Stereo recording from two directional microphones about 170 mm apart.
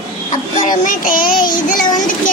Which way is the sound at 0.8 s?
55° left (ahead or behind).